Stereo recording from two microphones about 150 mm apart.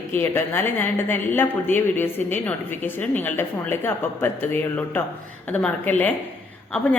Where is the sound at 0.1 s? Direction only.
15° left (ahead or behind).